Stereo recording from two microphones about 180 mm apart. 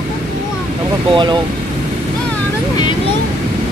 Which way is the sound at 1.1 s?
25° right (ahead or behind).